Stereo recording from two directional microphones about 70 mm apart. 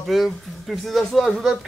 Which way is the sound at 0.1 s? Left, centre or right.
Centre.